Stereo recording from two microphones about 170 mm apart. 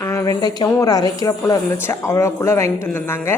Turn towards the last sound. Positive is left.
turn(degrees=15)  # may be behind; listen again after turning